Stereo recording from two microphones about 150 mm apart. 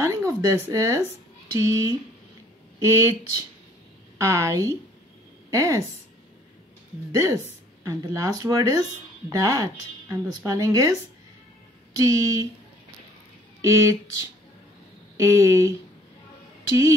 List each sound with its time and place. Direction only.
0.0 s speech: 20° right (ahead or behind)
7.1 s speech: 20° right (ahead or behind)
13.6 s speech: 20° right (ahead or behind)
15.1 s speech: 20° right (ahead or behind)